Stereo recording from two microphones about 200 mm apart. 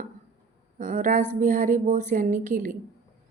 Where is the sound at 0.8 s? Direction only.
45° right (ahead or behind).